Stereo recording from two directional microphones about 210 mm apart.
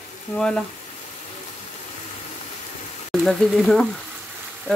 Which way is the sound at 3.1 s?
Centre (ahead or behind).